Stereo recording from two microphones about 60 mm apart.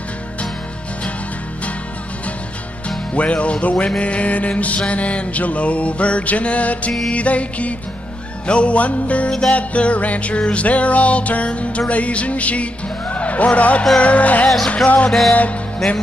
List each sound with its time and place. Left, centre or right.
3.2 s music: left
13.1 s speech: left
13.9 s music: left
15.0 s music: centre